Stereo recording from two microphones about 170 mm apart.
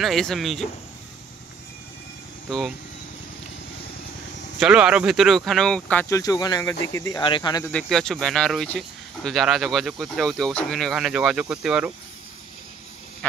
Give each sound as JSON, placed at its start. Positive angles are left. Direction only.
{"t": 0.0, "sound": "speech", "side_deg": 0}
{"t": 4.6, "sound": "speech", "side_deg": -5}
{"t": 6.0, "sound": "speech", "side_deg": 20}
{"t": 7.7, "sound": "speech", "side_deg": 5}